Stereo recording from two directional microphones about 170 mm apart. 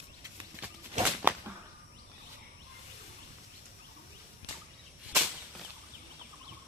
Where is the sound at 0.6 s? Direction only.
10° right (ahead or behind).